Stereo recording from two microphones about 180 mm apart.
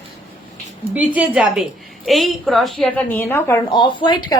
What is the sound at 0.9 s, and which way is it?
A woman's voice, 10° right (ahead or behind).